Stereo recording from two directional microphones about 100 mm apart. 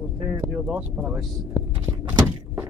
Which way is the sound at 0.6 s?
10° right (ahead or behind).